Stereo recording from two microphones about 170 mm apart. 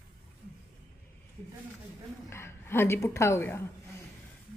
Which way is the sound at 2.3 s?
15° left (ahead or behind).